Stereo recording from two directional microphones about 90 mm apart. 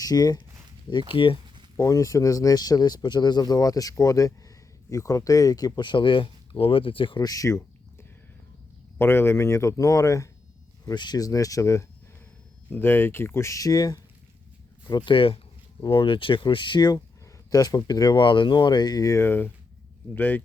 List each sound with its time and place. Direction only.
0.0 s speech: 45° left (ahead or behind)
0.9 s speech: 65° left (ahead or behind)
1.7 s speech: 35° left (ahead or behind); by 7.2 s 75° left (ahead or behind)
7.2 s a sound: 40° left (ahead or behind)
9.0 s speech: 25° left (ahead or behind)
10.8 s speech: 50° left (ahead or behind); by 11.9 s 35° left (ahead or behind)
12.7 s speech: 25° left (ahead or behind); by 14.0 s 45° left (ahead or behind)
14.8 s speech: 55° left (ahead or behind)
17.5 s speech: 40° left (ahead or behind)
19.1 s speech: 25° left (ahead or behind)